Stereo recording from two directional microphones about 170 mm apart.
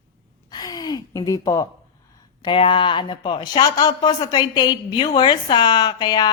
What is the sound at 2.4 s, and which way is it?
A woman's voice, 30° left (ahead or behind).